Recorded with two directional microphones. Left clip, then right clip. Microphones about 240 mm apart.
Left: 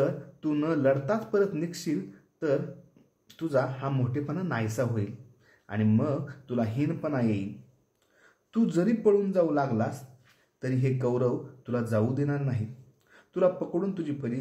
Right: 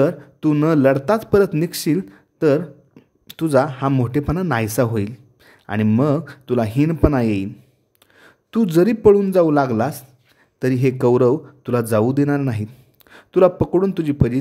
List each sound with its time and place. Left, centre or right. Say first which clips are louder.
0.0 s a man's voice: right 11 dB; right